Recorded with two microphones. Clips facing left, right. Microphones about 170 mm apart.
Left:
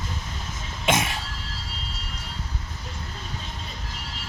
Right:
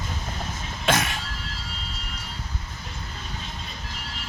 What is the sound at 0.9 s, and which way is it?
Music, 25° left (ahead or behind).